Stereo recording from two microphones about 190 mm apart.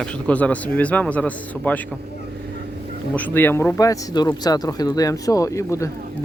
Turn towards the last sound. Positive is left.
turn(degrees=15)  # may be behind; listen again after turning